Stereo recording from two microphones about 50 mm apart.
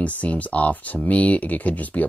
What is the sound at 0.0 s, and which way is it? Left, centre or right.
Speech, left.